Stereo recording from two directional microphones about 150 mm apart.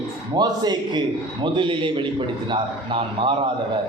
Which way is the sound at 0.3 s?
25° right (ahead or behind).